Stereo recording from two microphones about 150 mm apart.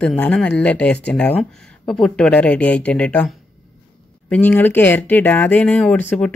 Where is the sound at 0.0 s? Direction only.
5° left (ahead or behind).